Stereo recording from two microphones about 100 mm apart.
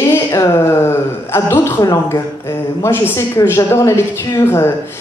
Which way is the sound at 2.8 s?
30° left (ahead or behind).